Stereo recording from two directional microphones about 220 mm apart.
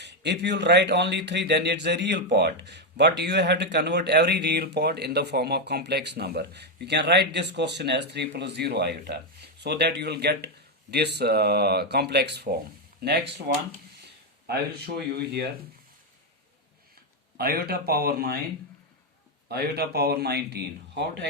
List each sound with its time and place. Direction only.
0.0 s speech: 50° right (ahead or behind)
17.3 s speech: 45° right (ahead or behind)
19.5 s speech: 45° right (ahead or behind)